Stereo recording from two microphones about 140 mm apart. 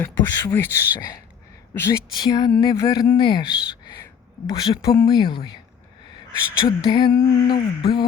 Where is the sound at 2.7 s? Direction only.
25° left (ahead or behind).